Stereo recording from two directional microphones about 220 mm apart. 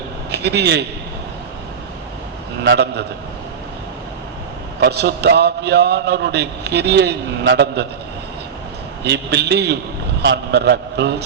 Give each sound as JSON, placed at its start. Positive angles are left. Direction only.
{"t": 0.3, "sound": "a man's voice", "side_deg": -50}
{"t": 2.6, "sound": "a man's voice", "side_deg": -50}
{"t": 4.8, "sound": "a man's voice", "side_deg": -50}
{"t": 9.0, "sound": "a man's voice", "side_deg": -50}